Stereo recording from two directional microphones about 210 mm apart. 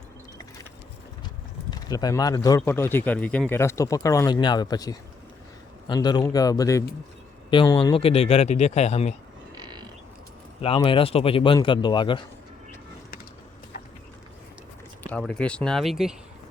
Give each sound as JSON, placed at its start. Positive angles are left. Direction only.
{"t": 1.7, "sound": "speech", "side_deg": 20}
{"t": 9.6, "sound": "a sound", "side_deg": -20}
{"t": 10.6, "sound": "speech", "side_deg": 25}
{"t": 15.1, "sound": "speech", "side_deg": 5}